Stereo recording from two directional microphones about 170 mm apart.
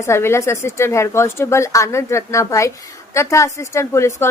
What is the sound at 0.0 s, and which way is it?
A woman's voice, 15° left (ahead or behind).